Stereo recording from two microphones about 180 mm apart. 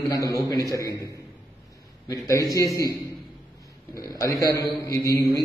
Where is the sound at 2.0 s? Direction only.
20° left (ahead or behind).